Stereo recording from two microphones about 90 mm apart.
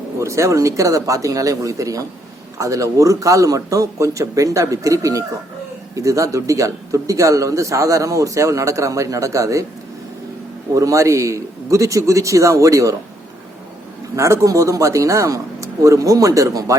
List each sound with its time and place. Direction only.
0.2 s speech: 35° right (ahead or behind)
10.8 s speech: 35° right (ahead or behind)
14.2 s speech: 35° right (ahead or behind)